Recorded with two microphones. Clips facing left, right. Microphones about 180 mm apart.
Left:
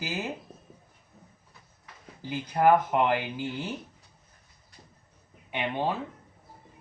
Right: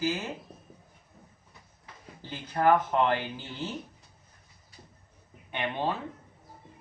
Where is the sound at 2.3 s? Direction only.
15° left (ahead or behind).